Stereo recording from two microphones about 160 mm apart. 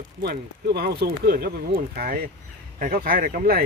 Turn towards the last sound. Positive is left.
turn(degrees=-65)  # may be behind; listen again after turning